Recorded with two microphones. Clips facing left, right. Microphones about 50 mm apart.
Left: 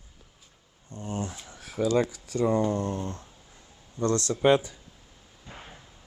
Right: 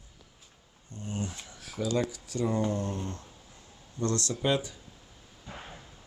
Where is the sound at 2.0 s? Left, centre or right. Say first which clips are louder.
Left 5 dB; left.